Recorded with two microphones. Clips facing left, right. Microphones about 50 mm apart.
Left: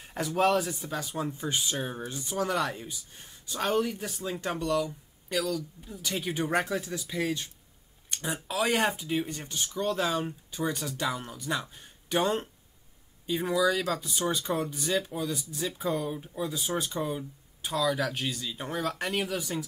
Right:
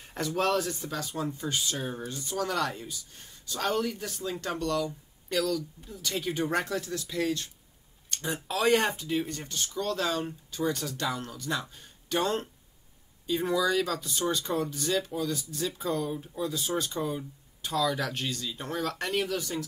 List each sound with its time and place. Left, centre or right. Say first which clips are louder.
0.0 s a sound: even; centre
0.4 s speech: left 3 dB; centre
13.3 s speech: even; centre